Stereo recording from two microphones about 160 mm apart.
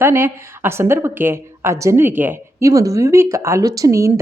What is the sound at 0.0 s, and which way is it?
Speech, 15° right (ahead or behind).